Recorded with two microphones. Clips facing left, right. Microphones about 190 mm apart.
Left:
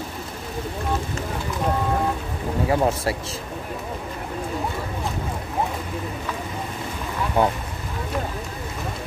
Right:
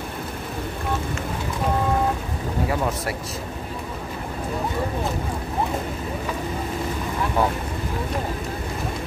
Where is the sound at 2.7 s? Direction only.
30° left (ahead or behind).